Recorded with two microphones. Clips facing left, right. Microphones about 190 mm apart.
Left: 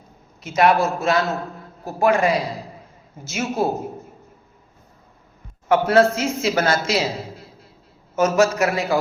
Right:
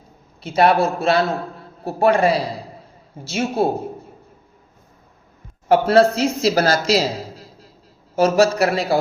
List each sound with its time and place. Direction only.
0.4 s a man's voice: 30° right (ahead or behind)
5.6 s a man's voice: 30° right (ahead or behind)